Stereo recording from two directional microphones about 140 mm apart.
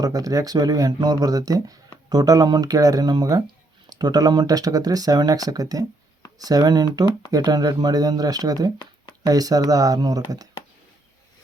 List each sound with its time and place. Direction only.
0.0 s speech: 25° right (ahead or behind)